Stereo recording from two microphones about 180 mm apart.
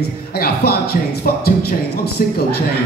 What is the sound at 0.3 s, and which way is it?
Speech, 55° left (ahead or behind).